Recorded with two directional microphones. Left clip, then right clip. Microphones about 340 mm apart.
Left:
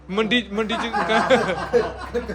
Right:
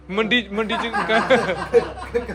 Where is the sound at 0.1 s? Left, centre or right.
Centre.